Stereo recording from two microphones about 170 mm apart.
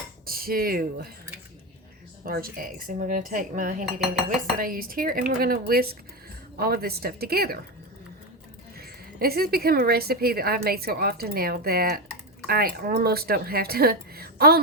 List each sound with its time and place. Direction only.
0.3 s speech: 60° right (ahead or behind)
2.2 s dishes: 60° right (ahead or behind)
4.5 s a woman's voice: 55° right (ahead or behind)
8.8 s a woman's voice: 65° right (ahead or behind)